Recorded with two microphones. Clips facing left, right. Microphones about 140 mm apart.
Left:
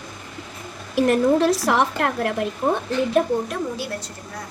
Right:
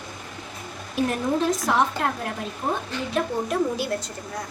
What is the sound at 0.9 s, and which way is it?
Speech, 70° left (ahead or behind).